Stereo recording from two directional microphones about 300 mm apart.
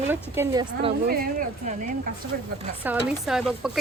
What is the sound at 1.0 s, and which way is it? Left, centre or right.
Speech, right.